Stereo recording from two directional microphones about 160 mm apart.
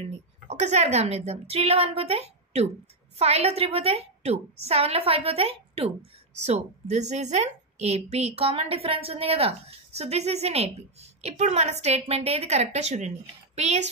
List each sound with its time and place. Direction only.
0.5 s a woman's voice: 45° right (ahead or behind)